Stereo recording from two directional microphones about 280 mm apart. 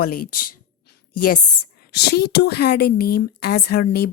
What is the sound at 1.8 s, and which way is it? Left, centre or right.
A woman's voice, left.